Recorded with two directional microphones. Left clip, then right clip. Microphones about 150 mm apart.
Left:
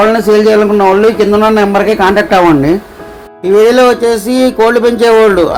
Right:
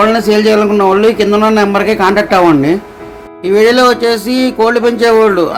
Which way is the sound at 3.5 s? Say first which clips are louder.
Left 2 dB; 15° left (ahead or behind).